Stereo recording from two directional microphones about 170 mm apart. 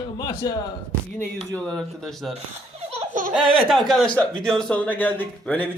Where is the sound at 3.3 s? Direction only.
5° right (ahead or behind).